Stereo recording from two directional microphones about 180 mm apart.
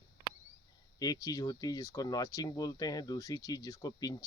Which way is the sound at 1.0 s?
20° left (ahead or behind).